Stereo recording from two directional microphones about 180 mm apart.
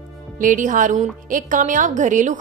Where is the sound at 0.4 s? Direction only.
45° right (ahead or behind).